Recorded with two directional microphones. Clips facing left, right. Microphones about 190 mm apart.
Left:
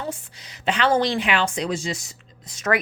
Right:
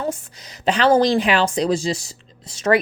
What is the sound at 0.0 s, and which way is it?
Speech, 40° right (ahead or behind).